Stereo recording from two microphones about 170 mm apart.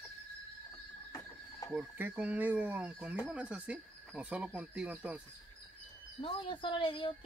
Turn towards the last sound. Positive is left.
turn(degrees=30)  # may be behind; listen again after turning